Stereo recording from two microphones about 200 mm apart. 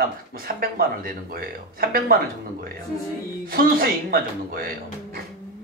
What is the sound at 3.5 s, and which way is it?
Speech, 45° right (ahead or behind).